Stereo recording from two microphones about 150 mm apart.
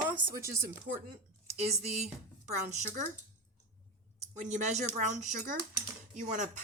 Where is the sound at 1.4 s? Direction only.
45° right (ahead or behind).